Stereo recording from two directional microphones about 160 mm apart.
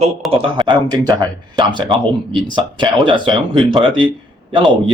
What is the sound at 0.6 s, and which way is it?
Speech, 30° right (ahead or behind).